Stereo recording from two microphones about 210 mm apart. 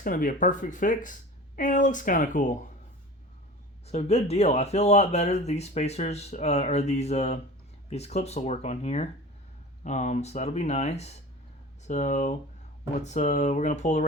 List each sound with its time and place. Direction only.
0.0 s speech: 40° left (ahead or behind)
3.8 s speech: 30° left (ahead or behind)